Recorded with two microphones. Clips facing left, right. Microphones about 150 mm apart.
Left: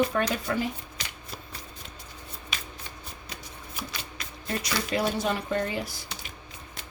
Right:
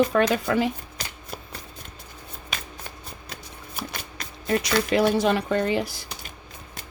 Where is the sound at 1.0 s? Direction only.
40° right (ahead or behind).